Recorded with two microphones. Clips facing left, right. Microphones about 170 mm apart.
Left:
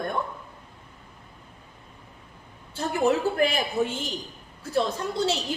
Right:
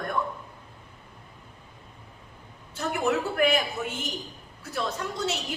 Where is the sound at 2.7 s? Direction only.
30° left (ahead or behind).